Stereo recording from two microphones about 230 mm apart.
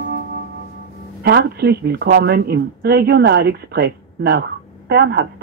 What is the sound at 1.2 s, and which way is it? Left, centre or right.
Speech, right.